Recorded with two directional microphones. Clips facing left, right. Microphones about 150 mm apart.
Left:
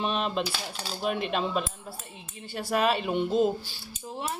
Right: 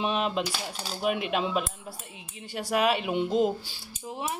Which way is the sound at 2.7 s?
5° right (ahead or behind).